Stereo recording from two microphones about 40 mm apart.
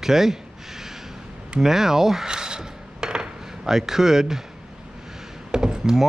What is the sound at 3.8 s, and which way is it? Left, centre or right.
Speech, centre.